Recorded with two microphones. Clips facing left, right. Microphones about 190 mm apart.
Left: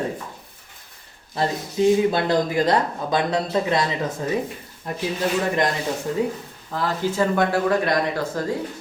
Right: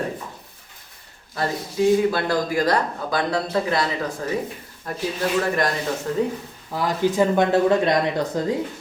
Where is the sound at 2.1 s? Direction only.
20° left (ahead or behind).